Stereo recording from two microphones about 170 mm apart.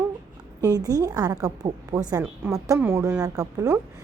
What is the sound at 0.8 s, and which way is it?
A woman's voice, 20° right (ahead or behind).